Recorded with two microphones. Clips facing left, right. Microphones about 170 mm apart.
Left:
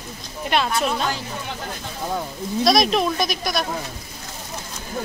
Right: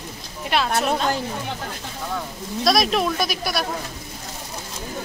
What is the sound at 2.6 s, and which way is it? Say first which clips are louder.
Speech: left 2 dB; centre (ahead or behind).